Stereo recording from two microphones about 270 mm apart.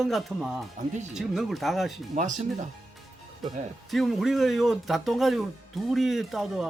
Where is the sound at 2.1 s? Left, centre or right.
Right.